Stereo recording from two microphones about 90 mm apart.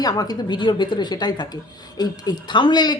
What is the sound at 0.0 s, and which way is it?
A woman's voice, 45° left (ahead or behind).